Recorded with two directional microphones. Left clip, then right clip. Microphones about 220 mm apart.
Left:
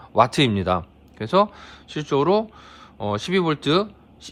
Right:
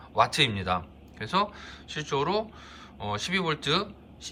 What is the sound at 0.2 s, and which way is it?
A man's voice, 25° left (ahead or behind).